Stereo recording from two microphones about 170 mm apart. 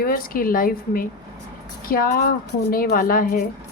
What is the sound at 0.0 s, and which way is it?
A woman's voice, 60° left (ahead or behind).